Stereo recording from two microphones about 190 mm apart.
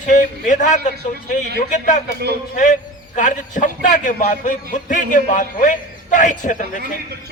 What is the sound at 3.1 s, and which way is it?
A man's voice, 40° left (ahead or behind).